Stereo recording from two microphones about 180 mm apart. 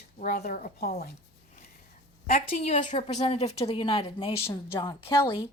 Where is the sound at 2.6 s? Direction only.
40° left (ahead or behind).